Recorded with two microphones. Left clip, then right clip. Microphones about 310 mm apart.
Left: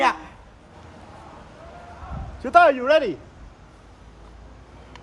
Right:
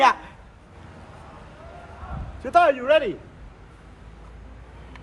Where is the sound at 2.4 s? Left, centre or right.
Left.